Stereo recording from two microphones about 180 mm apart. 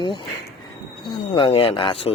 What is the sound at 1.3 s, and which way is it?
Speech, 30° left (ahead or behind).